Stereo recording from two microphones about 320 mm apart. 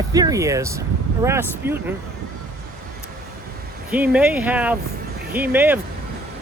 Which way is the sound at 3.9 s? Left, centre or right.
Centre.